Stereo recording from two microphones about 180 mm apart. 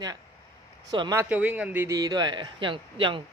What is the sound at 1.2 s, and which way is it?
A man's voice, 10° right (ahead or behind).